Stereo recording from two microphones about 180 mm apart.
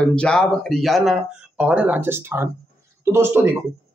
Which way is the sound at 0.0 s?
5° left (ahead or behind).